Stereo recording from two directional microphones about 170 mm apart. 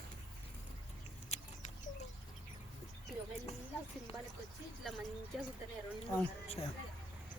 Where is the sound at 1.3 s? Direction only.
40° left (ahead or behind).